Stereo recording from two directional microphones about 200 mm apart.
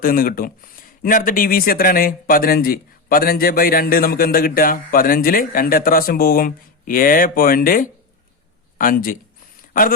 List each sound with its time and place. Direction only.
0.0 s speech: 45° left (ahead or behind)